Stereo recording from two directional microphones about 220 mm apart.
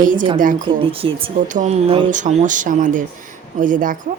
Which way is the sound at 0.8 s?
25° right (ahead or behind).